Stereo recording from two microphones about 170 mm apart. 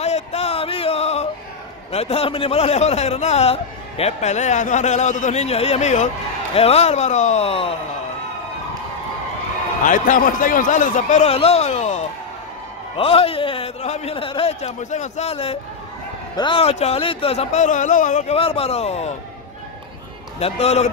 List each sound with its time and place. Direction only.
0.0 s a sound: 40° left (ahead or behind)
1.9 s a man's voice: 40° left (ahead or behind)
9.8 s a man's voice: 50° left (ahead or behind)
18.4 s a man's voice: 35° left (ahead or behind)
20.3 s a man's voice: 35° left (ahead or behind)